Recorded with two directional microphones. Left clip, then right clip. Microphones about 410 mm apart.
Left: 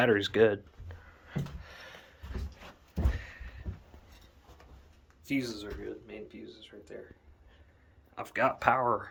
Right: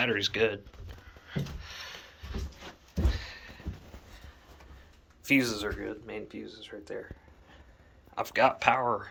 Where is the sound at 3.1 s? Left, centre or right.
Centre.